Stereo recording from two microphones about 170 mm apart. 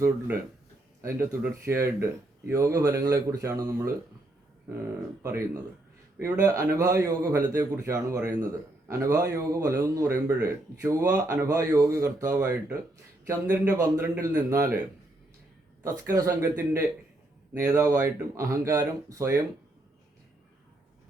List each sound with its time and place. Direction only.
1.0 s a man's voice: 15° right (ahead or behind)
15.8 s a man's voice: 20° right (ahead or behind)